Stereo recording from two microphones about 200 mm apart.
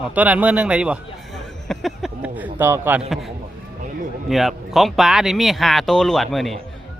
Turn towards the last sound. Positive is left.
turn(degrees=0)  # may be behind; listen again after turning